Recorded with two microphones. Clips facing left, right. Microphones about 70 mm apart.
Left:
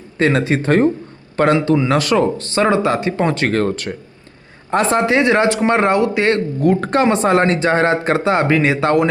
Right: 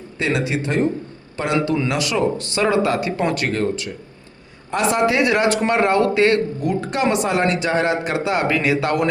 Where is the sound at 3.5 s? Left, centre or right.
Left.